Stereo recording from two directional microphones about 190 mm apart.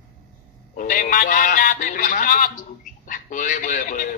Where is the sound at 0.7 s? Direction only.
45° left (ahead or behind).